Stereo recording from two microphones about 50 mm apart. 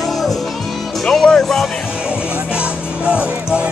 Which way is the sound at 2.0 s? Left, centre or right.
Right.